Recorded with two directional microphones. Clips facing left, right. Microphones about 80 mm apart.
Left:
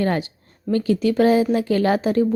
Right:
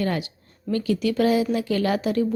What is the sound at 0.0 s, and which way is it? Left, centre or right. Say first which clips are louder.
A woman's voice: left 4 dB; left.